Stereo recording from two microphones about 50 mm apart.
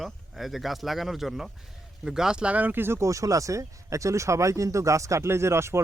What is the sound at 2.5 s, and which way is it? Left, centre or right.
Speech, right.